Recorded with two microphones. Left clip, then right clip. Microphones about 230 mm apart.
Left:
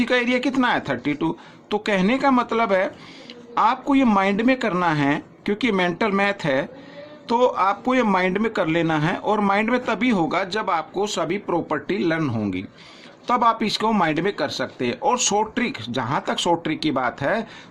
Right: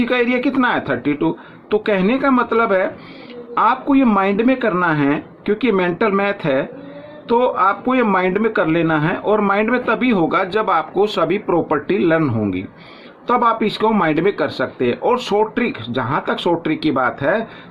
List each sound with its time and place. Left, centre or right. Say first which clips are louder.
0.0 s speech: right 3 dB; left